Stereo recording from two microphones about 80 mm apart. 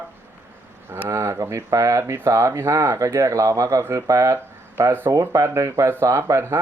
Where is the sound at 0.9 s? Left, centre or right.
Right.